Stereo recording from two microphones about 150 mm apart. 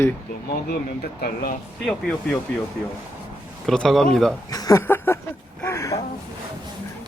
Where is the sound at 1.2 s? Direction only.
85° left.